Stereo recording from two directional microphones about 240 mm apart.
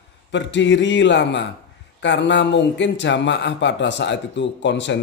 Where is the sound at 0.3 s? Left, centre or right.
Left.